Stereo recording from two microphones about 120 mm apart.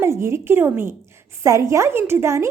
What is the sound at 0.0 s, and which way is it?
A woman's voice, 20° right (ahead or behind).